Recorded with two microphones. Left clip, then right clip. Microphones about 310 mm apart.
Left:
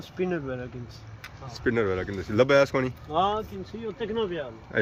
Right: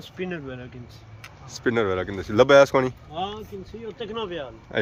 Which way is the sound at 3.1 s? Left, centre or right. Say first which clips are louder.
Left 11 dB; left.